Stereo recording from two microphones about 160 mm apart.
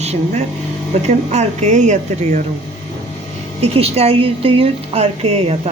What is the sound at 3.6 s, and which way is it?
Speech, 40° right (ahead or behind).